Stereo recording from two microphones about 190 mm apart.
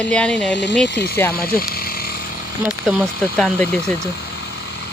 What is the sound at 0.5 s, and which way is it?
Speech, 70° left (ahead or behind).